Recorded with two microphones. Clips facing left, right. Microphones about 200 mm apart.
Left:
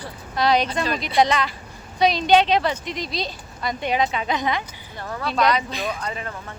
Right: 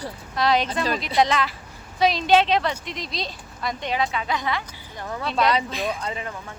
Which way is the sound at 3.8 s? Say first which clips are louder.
Left 4 dB; 20° left (ahead or behind).